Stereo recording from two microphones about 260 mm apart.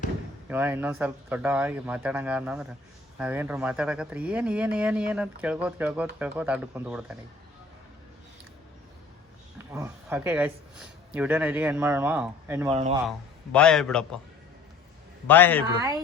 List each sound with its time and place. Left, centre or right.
0.4 s speech: centre
9.7 s speech: centre
12.7 s speech: right
13.1 s speech: centre
15.3 s a man's voice: centre